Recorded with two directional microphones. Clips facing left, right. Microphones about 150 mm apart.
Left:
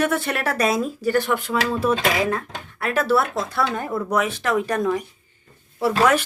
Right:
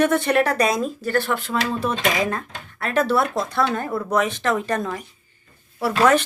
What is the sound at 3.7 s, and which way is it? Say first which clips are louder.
Speech: even; 15° left (ahead or behind).